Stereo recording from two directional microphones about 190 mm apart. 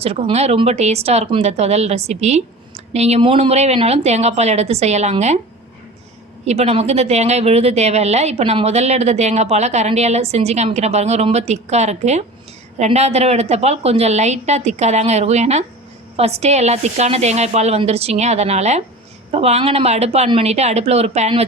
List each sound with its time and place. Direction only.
0.0 s speech: 30° right (ahead or behind)
6.4 s speech: 35° right (ahead or behind)